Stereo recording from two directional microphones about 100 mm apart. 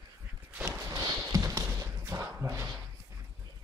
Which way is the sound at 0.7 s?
35° right (ahead or behind).